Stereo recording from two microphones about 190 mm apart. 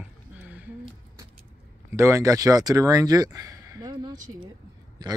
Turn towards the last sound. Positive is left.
turn(degrees=-20)  # may be behind; listen again after turning